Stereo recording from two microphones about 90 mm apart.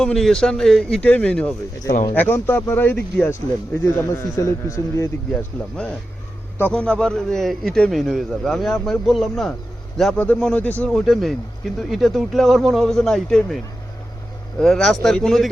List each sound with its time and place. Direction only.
0.0 s a man's voice: 5° left (ahead or behind)
1.0 s a man's voice: 15° left (ahead or behind); by 5.0 s 35° left (ahead or behind)
6.6 s a man's voice: 15° left (ahead or behind)
10.2 s speech: 15° left (ahead or behind)
10.8 s a man's voice: centre (ahead or behind)
14.6 s a man's voice: 5° left (ahead or behind)